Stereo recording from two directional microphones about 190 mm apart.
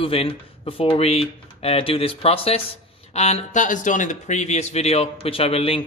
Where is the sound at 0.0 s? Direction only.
30° left (ahead or behind).